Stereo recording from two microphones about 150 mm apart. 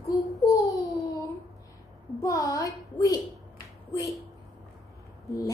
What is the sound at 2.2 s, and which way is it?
Speech, 20° left (ahead or behind).